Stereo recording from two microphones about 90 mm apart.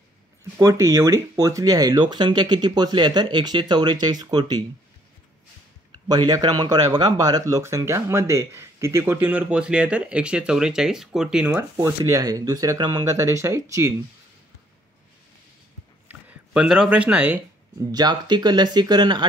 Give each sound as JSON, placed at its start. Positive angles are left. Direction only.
{"t": 0.6, "sound": "speech", "side_deg": -35}
{"t": 5.9, "sound": "speech", "side_deg": -50}
{"t": 9.2, "sound": "speech", "side_deg": -15}
{"t": 11.5, "sound": "speech", "side_deg": -25}
{"t": 12.0, "sound": "speech", "side_deg": -45}
{"t": 13.2, "sound": "speech", "side_deg": -35}
{"t": 16.1, "sound": "a sound", "side_deg": -15}
{"t": 16.6, "sound": "speech", "side_deg": -10}
{"t": 17.9, "sound": "speech", "side_deg": -50}